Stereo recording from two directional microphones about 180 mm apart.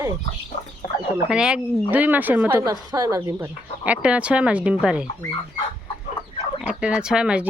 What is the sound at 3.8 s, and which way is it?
Speech, 5° right (ahead or behind).